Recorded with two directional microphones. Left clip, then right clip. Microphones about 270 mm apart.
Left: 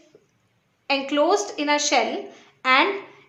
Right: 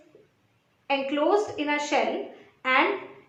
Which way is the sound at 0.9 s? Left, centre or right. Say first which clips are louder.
Left 4 dB; left.